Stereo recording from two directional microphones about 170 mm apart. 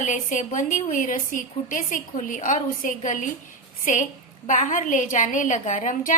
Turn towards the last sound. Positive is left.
turn(degrees=45)  # may be behind; listen again after turning